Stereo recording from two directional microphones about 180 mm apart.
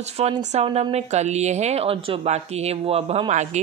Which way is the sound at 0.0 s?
35° right (ahead or behind).